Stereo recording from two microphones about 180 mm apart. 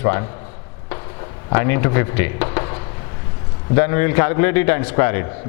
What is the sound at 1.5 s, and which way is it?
A man's voice, 15° left (ahead or behind).